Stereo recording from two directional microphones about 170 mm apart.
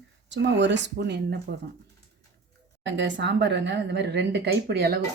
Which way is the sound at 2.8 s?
90° right.